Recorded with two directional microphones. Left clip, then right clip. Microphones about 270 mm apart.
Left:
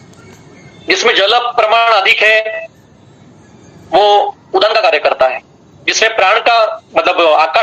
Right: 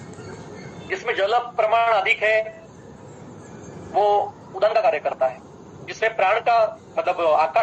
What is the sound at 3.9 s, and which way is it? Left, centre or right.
A man's voice, left.